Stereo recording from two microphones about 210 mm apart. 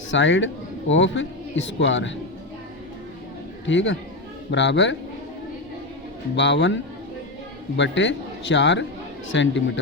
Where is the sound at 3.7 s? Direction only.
60° left (ahead or behind).